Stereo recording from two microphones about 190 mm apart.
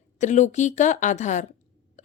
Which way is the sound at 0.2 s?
40° left (ahead or behind).